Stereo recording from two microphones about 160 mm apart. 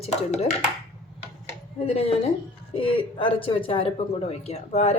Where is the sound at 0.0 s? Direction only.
40° left (ahead or behind).